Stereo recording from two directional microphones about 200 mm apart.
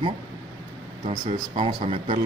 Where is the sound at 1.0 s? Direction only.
30° right (ahead or behind).